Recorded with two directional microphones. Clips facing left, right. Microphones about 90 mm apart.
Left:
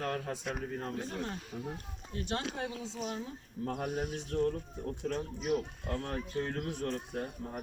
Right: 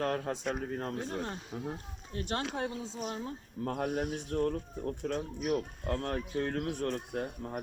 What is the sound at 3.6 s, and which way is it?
Speech, 60° right (ahead or behind).